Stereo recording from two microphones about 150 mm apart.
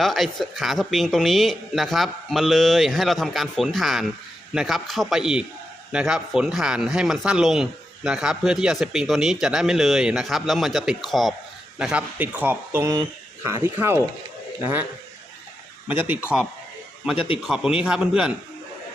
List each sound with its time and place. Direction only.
0.0 s speech: centre (ahead or behind)
15.9 s speech: 10° right (ahead or behind)
17.4 s speech: 5° right (ahead or behind)